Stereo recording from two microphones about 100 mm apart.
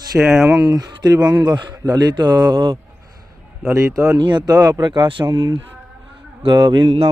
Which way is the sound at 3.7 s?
30° right (ahead or behind).